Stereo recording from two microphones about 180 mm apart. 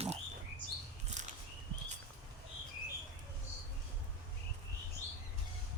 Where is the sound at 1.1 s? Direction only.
40° right (ahead or behind).